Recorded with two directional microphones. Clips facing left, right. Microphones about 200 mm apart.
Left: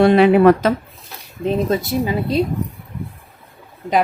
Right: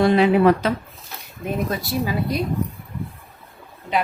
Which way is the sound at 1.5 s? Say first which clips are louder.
Left 6 dB; 25° left (ahead or behind).